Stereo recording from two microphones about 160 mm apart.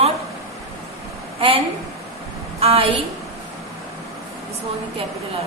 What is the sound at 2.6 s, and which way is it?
Speech, 40° right (ahead or behind).